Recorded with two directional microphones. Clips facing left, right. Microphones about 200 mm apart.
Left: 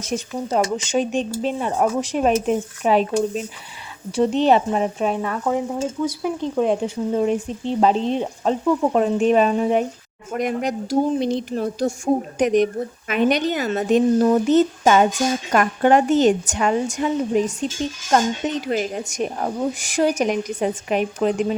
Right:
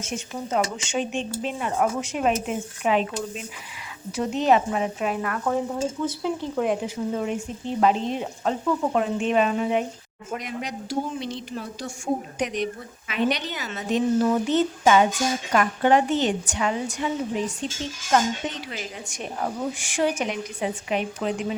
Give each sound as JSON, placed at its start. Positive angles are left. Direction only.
{"t": 0.0, "sound": "speech", "side_deg": 35}
{"t": 5.5, "sound": "stir", "side_deg": 15}
{"t": 6.6, "sound": "speech", "side_deg": 30}
{"t": 9.0, "sound": "speech", "side_deg": 40}
{"t": 10.3, "sound": "speech", "side_deg": 50}